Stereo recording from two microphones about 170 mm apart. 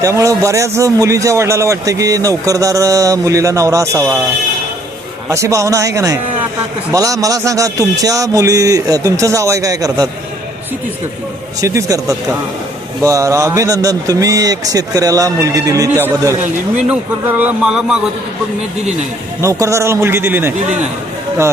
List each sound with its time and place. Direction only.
0.0 s a man's voice: 20° right (ahead or behind)
5.3 s a man's voice: 20° right (ahead or behind)
11.6 s a man's voice: 20° right (ahead or behind)
19.4 s a man's voice: 20° right (ahead or behind)